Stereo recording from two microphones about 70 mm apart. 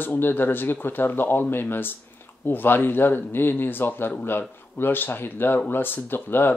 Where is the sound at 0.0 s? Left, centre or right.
Left.